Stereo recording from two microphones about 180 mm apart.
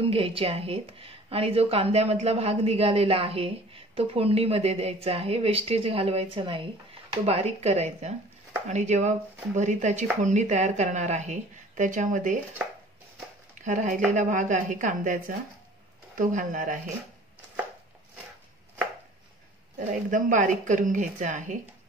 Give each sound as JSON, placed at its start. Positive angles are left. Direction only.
{"t": 0.0, "sound": "speech", "side_deg": -30}
{"t": 13.6, "sound": "a woman's voice", "side_deg": -45}
{"t": 19.9, "sound": "a woman's voice", "side_deg": -45}